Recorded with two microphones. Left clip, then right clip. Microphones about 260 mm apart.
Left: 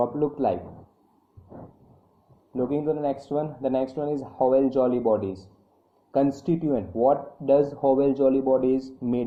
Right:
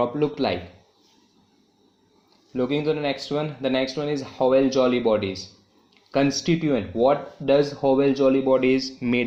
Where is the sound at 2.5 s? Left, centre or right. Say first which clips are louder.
Right 2 dB; right.